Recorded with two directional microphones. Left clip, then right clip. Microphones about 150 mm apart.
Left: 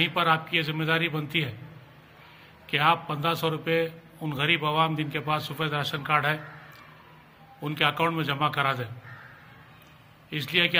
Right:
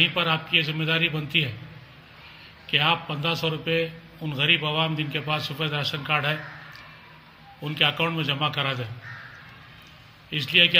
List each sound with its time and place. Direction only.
0.0 s a man's voice: 15° left (ahead or behind)
2.7 s a man's voice: 15° left (ahead or behind)
7.6 s a man's voice: 15° left (ahead or behind)
10.3 s a man's voice: 15° left (ahead or behind)